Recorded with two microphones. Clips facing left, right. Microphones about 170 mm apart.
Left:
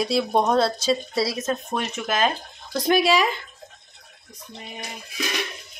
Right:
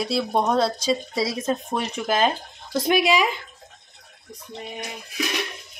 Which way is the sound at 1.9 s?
30° right (ahead or behind).